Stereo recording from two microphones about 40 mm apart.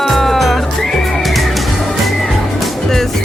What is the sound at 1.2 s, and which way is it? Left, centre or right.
Music, centre.